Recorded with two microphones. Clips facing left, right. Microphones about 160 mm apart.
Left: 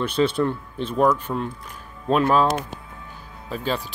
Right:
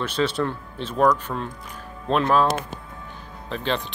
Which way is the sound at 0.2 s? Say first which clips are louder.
Left 3 dB; 25° left (ahead or behind).